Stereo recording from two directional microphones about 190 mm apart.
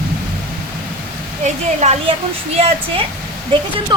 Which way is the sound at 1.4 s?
35° right (ahead or behind).